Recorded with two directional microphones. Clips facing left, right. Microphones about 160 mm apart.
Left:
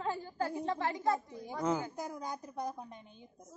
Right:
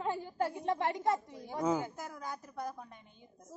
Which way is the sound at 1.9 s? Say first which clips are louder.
Left 3 dB; 20° left (ahead or behind).